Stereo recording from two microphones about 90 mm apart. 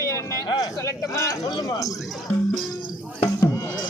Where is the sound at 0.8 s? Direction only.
40° left (ahead or behind).